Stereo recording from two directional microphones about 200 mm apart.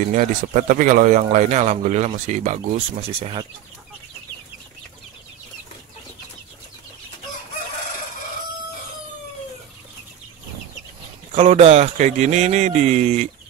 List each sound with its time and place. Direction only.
0.0 s speech: 40° right (ahead or behind)
11.3 s speech: 30° right (ahead or behind)